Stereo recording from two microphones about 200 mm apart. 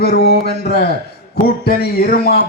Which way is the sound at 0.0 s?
50° left (ahead or behind).